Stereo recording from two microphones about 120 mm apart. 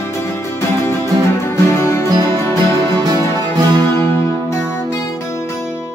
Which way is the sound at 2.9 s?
35° right (ahead or behind).